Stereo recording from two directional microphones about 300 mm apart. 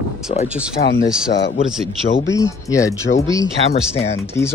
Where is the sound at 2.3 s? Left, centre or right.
Centre.